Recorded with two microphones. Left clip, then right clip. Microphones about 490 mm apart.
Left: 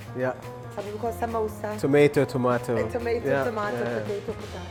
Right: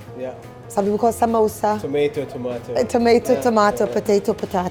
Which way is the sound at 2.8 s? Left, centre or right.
Right.